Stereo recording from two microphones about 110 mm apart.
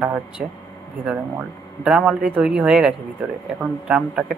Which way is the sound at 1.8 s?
10° right (ahead or behind).